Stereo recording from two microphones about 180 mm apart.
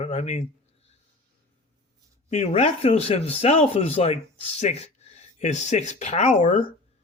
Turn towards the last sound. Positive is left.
turn(degrees=45)  # may be behind; listen again after turning